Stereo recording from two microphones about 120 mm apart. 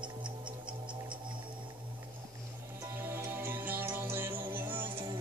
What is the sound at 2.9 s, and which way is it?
Music, 20° right (ahead or behind).